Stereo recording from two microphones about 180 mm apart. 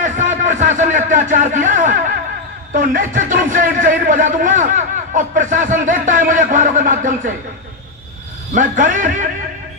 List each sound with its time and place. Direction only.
0.0 s a sound: 45° right (ahead or behind)
2.7 s a man's voice: 45° right (ahead or behind)
8.5 s speech: 45° right (ahead or behind)